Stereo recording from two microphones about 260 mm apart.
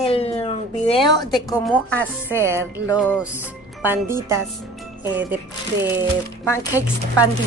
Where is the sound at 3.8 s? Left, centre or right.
Centre.